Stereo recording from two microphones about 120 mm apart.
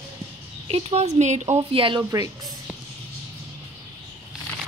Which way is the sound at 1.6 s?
45° right (ahead or behind).